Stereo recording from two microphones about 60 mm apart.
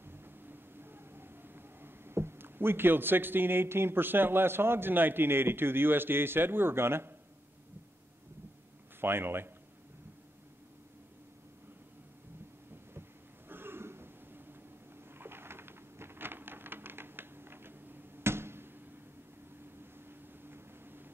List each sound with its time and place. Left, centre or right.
0.0 s vehicle: right
9.0 s a man's voice: right
13.5 s a sound: right
19.8 s vehicle: right